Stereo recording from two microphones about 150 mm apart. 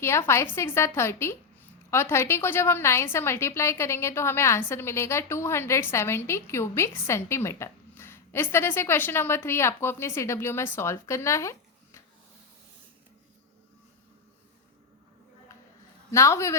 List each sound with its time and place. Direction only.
0.0 s a woman's voice: 15° left (ahead or behind)
16.1 s a woman's voice: 20° left (ahead or behind)